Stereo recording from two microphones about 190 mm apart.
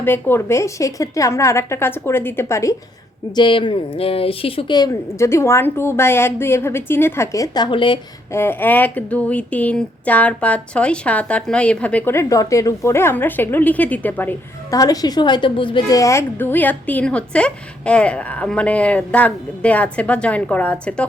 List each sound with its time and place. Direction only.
0.0 s speech: 10° left (ahead or behind)
3.3 s speech: 25° left (ahead or behind)
8.3 s speech: 10° left (ahead or behind)